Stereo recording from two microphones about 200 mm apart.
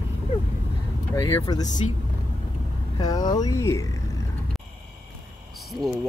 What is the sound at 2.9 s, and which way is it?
Speech, 20° left (ahead or behind).